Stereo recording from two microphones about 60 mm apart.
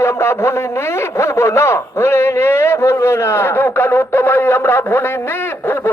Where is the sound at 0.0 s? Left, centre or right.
Left.